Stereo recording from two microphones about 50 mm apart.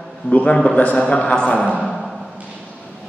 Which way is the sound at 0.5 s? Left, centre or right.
Left.